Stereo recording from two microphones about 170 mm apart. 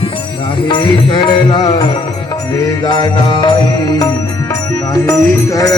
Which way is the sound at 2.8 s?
25° left (ahead or behind).